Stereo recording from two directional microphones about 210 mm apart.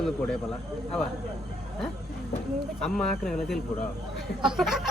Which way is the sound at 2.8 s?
Centre (ahead or behind).